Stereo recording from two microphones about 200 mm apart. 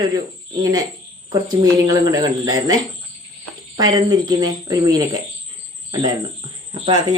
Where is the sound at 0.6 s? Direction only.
20° right (ahead or behind).